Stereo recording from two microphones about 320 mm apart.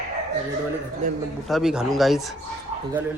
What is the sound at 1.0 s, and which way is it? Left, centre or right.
Speech, right.